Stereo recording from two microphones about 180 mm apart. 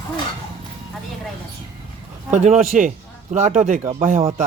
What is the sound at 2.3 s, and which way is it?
A man's voice, 40° right (ahead or behind).